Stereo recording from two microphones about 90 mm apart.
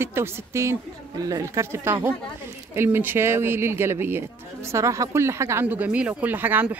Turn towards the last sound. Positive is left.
turn(degrees=-20)  # may be behind; listen again after turning